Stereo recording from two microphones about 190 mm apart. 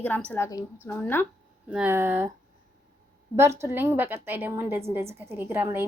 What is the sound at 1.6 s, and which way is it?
Speech, 5° right (ahead or behind).